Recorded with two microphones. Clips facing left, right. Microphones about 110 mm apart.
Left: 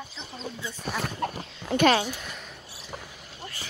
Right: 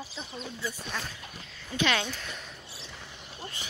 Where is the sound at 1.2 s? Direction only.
65° left (ahead or behind).